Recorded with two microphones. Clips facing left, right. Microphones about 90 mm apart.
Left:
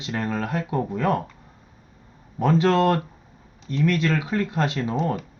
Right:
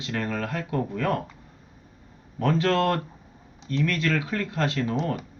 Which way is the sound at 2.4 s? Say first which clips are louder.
Left 4 dB; 20° left (ahead or behind).